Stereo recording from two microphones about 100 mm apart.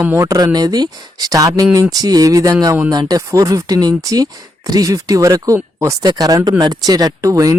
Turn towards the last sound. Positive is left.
turn(degrees=-35)  # may be behind; listen again after turning